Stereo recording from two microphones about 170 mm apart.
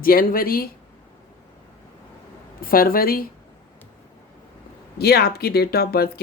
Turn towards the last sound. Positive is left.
turn(degrees=65)  # may be behind; listen again after turning